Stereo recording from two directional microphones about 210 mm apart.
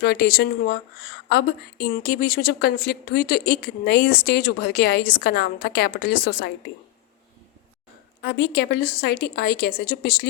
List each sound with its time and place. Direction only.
0.0 s a woman's voice: 50° left (ahead or behind)
8.2 s a woman's voice: 50° left (ahead or behind)